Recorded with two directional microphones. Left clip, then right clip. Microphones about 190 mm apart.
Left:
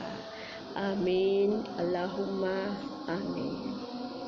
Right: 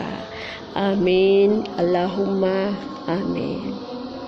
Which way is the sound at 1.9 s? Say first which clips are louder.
Right 11 dB; 45° right (ahead or behind).